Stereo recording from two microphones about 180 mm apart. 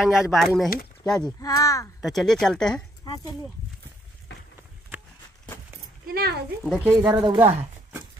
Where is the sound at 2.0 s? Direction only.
Centre (ahead or behind).